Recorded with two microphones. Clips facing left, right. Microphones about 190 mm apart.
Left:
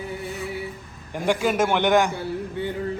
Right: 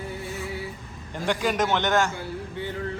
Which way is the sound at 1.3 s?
5° left (ahead or behind).